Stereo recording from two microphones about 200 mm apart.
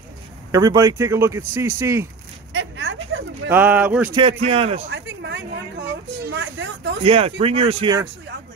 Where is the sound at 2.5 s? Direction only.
75° right (ahead or behind).